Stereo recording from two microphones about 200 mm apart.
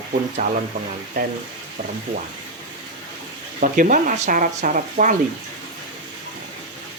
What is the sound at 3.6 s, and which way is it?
Speech, 40° right (ahead or behind).